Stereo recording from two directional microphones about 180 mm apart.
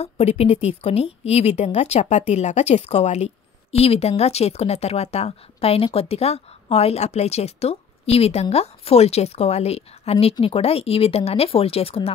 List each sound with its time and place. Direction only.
0.0 s a woman's voice: 35° left (ahead or behind)